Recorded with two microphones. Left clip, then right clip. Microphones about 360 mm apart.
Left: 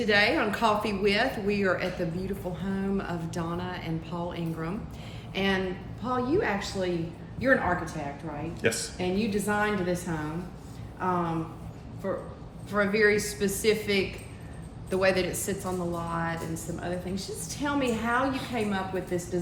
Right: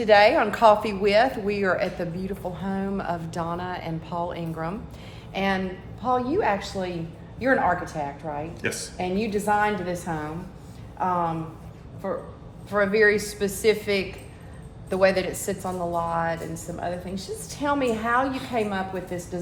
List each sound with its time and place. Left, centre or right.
0.0 s speech: centre
8.6 s speech: centre
9.0 s speech: centre
12.7 s speech: centre